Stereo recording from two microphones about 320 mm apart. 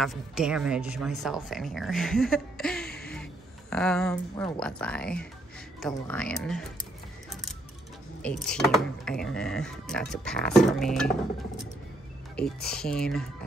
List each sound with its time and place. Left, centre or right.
0.0 s speech: centre
2.9 s a sound: left
3.7 s speech: centre
8.2 s speech: centre
12.7 s speech: centre